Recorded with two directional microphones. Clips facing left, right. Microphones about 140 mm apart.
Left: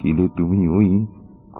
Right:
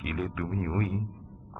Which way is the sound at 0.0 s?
30° left (ahead or behind).